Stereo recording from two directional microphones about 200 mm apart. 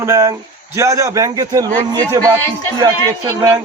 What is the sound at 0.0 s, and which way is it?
A man's voice, 15° right (ahead or behind).